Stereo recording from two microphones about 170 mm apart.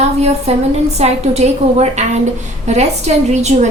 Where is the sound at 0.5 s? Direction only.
35° right (ahead or behind).